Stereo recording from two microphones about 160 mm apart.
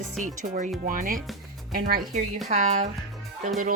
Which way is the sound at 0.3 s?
50° right (ahead or behind).